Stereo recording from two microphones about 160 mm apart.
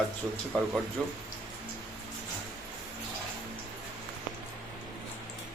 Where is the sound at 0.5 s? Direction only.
5° left (ahead or behind).